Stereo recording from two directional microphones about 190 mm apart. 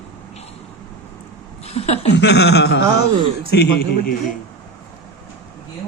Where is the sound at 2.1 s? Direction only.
65° left (ahead or behind).